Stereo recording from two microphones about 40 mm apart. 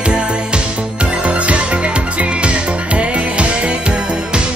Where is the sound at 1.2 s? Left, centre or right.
Right.